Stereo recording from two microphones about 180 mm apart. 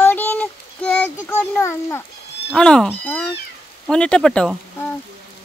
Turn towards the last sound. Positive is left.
turn(degrees=5)  # may be behind; listen again after turning